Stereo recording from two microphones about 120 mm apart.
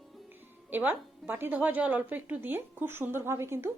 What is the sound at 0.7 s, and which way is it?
A woman's voice, 15° right (ahead or behind).